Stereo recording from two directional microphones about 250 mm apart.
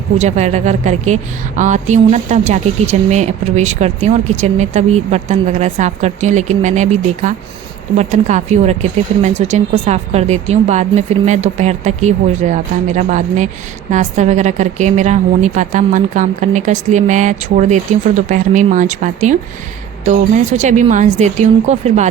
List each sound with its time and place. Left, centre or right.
0.2 s a woman's voice: right